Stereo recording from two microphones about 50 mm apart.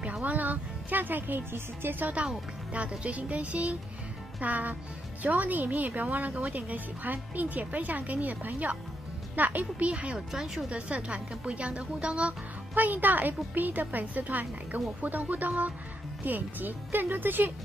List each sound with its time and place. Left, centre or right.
0.2 s a woman's voice: right
2.9 s a woman's voice: right
9.8 s speech: right
10.3 s speech: centre
10.7 s a woman's voice: right